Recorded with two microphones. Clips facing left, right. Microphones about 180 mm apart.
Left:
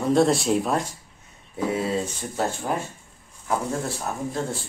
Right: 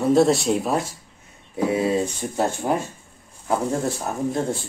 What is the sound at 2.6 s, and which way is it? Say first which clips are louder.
Speech: right 4 dB; 20° right (ahead or behind).